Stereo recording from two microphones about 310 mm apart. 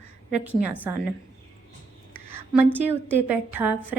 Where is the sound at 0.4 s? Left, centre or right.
Centre.